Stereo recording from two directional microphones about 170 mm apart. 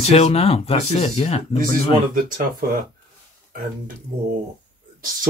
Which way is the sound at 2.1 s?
55° right (ahead or behind).